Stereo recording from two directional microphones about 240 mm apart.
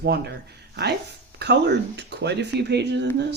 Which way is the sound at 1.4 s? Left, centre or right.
Right.